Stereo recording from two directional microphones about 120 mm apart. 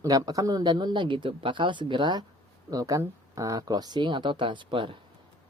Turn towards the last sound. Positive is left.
turn(degrees=-45)  # may be behind; listen again after turning